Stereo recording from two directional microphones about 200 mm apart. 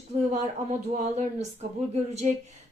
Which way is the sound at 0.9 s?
35° right (ahead or behind).